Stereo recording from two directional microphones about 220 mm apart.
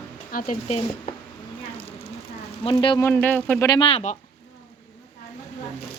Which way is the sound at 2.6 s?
20° left (ahead or behind).